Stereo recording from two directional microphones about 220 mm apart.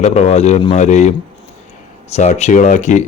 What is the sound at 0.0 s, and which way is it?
A man's voice, 30° left (ahead or behind).